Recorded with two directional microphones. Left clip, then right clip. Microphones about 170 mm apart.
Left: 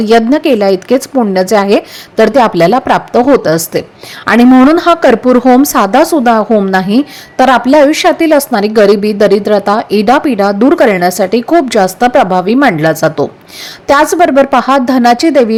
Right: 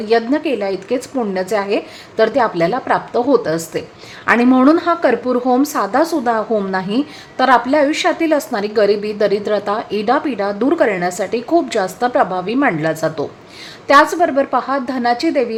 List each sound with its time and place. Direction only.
0.0 s a woman's voice: 40° left (ahead or behind)